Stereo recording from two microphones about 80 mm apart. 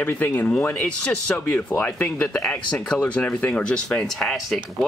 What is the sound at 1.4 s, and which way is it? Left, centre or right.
Speech, left.